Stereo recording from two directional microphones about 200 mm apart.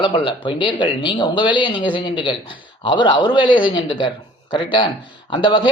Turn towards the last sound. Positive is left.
turn(degrees=25)  # may be behind; listen again after turning